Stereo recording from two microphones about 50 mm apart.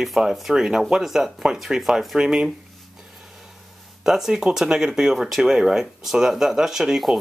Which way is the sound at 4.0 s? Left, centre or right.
Centre.